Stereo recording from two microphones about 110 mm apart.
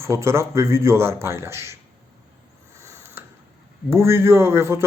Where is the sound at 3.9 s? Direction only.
20° right (ahead or behind).